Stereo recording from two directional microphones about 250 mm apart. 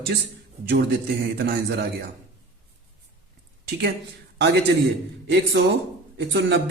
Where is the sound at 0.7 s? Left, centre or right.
Right.